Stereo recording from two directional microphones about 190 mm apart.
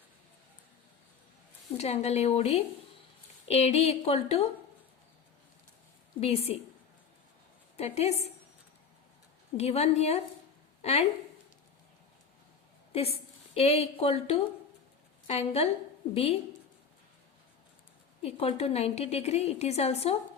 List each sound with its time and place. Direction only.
1.8 s a woman's voice: 35° left (ahead or behind)
6.1 s a woman's voice: 30° left (ahead or behind)
7.8 s a woman's voice: 35° left (ahead or behind)
9.6 s a woman's voice: 35° left (ahead or behind)
12.9 s a woman's voice: 30° left (ahead or behind)
18.2 s a woman's voice: 30° left (ahead or behind)